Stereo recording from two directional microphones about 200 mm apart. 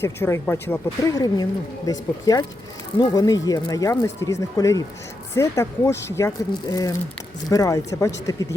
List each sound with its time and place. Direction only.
0.0 s speech: 10° left (ahead or behind)